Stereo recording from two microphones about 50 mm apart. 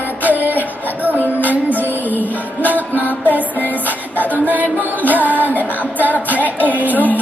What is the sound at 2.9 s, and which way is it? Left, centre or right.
Music, left.